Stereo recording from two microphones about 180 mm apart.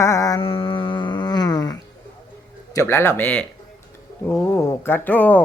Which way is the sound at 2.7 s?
15° left (ahead or behind).